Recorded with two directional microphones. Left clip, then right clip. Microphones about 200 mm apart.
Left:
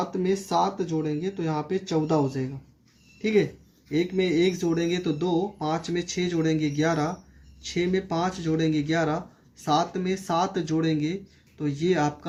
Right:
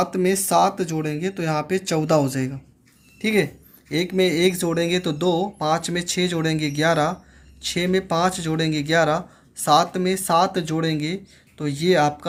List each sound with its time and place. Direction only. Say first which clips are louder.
0.0 s speech: right 6 dB; 35° right (ahead or behind)